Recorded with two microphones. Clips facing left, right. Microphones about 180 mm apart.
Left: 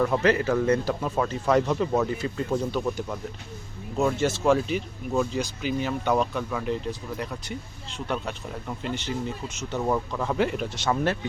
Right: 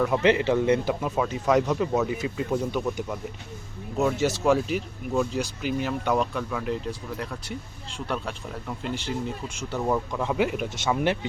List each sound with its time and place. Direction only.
0.2 s speech: 20° right (ahead or behind)
1.0 s speech: 5° right (ahead or behind)
11.0 s speech: 20° right (ahead or behind)